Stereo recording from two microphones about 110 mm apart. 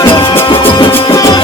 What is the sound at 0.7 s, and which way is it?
Music, 50° left (ahead or behind).